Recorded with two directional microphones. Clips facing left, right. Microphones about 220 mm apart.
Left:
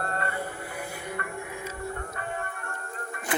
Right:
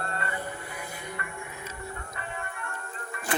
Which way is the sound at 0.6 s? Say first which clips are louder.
Left 3 dB; 10° left (ahead or behind).